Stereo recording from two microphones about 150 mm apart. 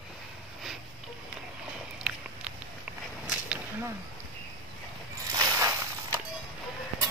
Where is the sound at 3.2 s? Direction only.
10° right (ahead or behind).